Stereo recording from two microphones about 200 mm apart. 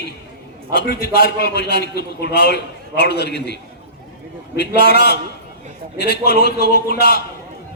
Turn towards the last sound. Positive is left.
turn(degrees=55)  # may be behind; listen again after turning